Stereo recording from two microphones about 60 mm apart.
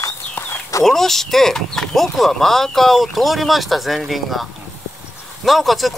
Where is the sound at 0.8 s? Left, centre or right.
Centre.